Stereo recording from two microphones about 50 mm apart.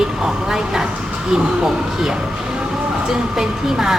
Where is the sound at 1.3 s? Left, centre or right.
Centre.